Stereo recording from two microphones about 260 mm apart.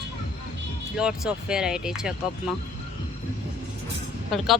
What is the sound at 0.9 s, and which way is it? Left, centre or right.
Speech, centre.